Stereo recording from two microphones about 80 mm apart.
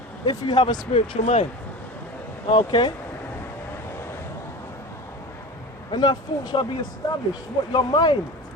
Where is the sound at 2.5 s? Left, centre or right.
Left.